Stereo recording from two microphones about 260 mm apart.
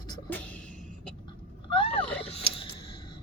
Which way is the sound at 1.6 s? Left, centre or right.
Centre.